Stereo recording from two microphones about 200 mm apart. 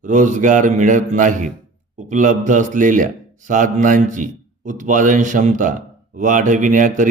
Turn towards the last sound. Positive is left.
turn(degrees=-40)  # may be behind; listen again after turning